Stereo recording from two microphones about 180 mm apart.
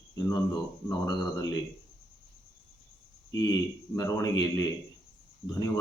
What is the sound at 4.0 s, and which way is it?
Speech, 20° left (ahead or behind).